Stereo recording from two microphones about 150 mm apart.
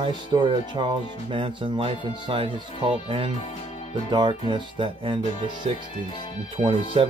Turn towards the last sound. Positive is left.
turn(degrees=-35)  # may be behind; listen again after turning